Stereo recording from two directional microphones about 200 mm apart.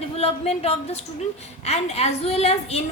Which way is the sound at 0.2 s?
30° left (ahead or behind).